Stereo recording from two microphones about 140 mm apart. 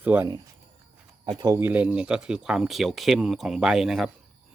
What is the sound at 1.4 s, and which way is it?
Speech, 25° right (ahead or behind).